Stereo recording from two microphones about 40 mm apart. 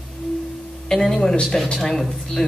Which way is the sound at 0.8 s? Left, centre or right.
Centre.